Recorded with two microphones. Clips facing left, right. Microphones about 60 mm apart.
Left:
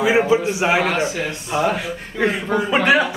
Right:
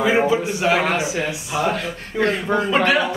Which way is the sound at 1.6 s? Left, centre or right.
Centre.